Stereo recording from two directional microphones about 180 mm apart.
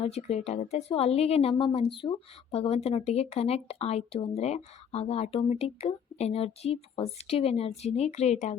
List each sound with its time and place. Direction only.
0.0 s a woman's voice: 35° left (ahead or behind)